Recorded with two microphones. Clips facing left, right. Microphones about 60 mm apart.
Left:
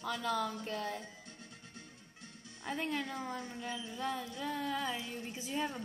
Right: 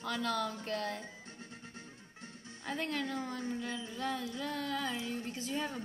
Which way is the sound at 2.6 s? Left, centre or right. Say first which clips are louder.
Even; centre.